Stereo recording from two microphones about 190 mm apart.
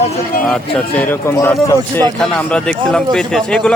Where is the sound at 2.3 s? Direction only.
5° left (ahead or behind).